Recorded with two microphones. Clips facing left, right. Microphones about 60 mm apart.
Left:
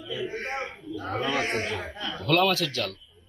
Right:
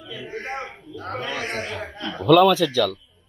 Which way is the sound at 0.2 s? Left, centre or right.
Right.